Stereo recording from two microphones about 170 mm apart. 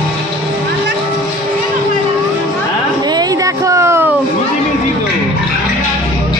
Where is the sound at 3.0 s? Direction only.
25° right (ahead or behind).